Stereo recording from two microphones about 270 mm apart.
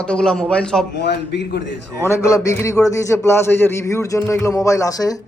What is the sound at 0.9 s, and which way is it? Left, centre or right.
Speech, left.